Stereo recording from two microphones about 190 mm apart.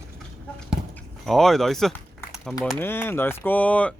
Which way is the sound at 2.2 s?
15° left (ahead or behind).